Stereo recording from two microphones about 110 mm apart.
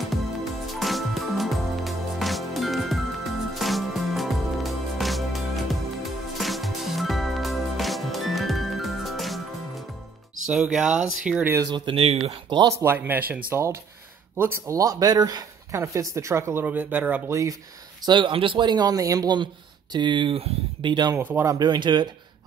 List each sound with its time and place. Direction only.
0.7 s music: centre (ahead or behind)
10.4 s speech: 5° right (ahead or behind)
11.6 s speech: 45° right (ahead or behind); by 12.4 s 65° right (ahead or behind)
12.6 s speech: 25° right (ahead or behind)
17.3 s speech: 30° right (ahead or behind)
18.0 s speech: 45° right (ahead or behind)
21.2 s speech: 15° right (ahead or behind)
21.5 s speech: 40° right (ahead or behind)